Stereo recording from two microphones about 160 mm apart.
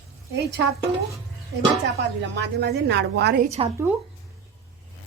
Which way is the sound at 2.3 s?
90° right.